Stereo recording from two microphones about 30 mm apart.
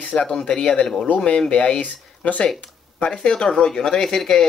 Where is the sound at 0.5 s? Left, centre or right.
Left.